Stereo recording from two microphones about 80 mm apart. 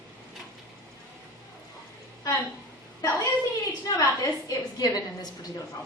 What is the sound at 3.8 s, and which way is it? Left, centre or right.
A woman's voice, left.